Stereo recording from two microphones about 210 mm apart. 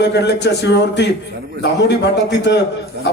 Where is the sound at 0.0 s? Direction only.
55° left (ahead or behind).